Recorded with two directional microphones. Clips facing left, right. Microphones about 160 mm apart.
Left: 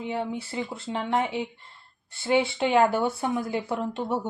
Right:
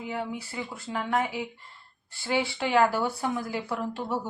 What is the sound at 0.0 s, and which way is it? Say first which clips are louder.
Speech: left 3 dB; 25° left (ahead or behind).